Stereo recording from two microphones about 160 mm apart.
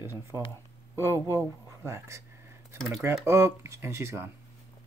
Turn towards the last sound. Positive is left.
turn(degrees=-15)  # may be behind; listen again after turning